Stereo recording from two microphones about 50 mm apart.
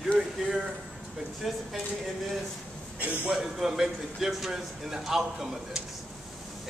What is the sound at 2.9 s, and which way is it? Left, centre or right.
Speech, right.